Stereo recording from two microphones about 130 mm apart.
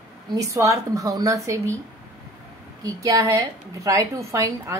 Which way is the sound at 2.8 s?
25° right (ahead or behind).